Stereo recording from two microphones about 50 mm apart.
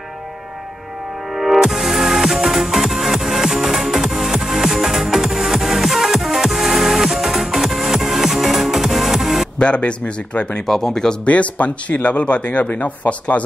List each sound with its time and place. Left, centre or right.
1.3 s music: centre
9.6 s speech: left
10.7 s speech: centre
11.2 s speech: left